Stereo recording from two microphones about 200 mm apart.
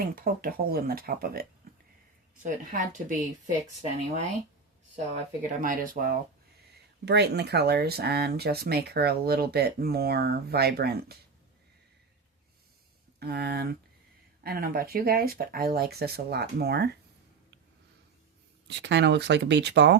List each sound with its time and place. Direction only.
0.2 s a woman's voice: 45° right (ahead or behind)
4.9 s speech: 40° right (ahead or behind)
7.0 s speech: 55° right (ahead or behind)
13.1 s speech: 55° right (ahead or behind)
18.7 s speech: 60° right (ahead or behind)